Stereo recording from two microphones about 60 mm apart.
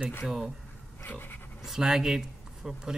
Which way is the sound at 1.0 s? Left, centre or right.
Left.